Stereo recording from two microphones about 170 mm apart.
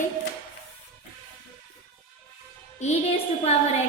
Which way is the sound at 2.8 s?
40° left (ahead or behind).